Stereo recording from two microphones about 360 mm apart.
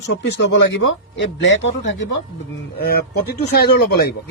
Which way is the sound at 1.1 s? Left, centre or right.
Left.